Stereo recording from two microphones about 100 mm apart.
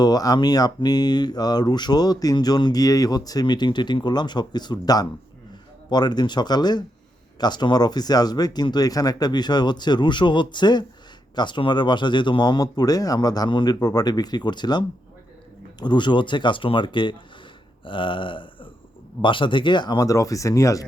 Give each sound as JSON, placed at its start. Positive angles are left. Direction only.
{"t": 0.0, "sound": "speech", "side_deg": 40}
{"t": 17.8, "sound": "a sound", "side_deg": 55}
{"t": 19.2, "sound": "speech", "side_deg": 55}
{"t": 20.1, "sound": "speech", "side_deg": 35}